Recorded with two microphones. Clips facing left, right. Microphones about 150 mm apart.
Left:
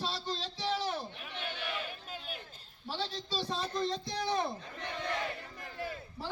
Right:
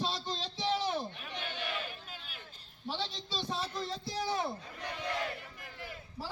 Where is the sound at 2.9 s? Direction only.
10° left (ahead or behind).